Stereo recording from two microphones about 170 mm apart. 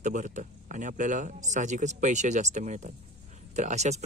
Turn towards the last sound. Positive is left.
turn(degrees=-40)  # may be behind; listen again after turning